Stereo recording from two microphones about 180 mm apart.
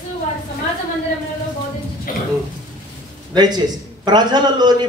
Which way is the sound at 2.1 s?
50° left (ahead or behind).